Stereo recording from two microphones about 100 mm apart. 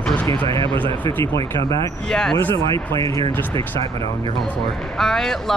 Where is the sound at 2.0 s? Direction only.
5° left (ahead or behind).